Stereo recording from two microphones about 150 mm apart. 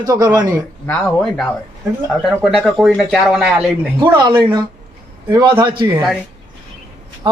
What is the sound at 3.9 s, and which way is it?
A woman's voice, 30° right (ahead or behind).